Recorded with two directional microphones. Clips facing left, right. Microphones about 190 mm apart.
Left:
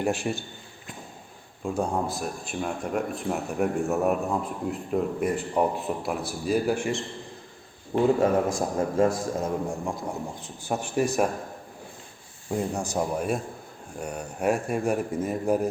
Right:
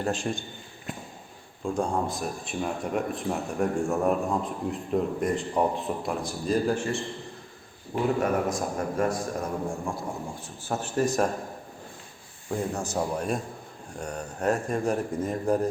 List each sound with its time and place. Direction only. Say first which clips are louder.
0.0 s speech: left 2 dB; 10° left (ahead or behind)
1.6 s speech: even; 5° left (ahead or behind)
8.2 s a man's voice: left 3 dB; 25° left (ahead or behind); by 11.3 s 10° left (ahead or behind)
12.5 s speech: left 1 dB; 15° left (ahead or behind)